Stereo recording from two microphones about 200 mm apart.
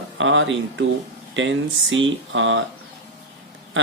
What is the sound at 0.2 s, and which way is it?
Speech, 70° right (ahead or behind).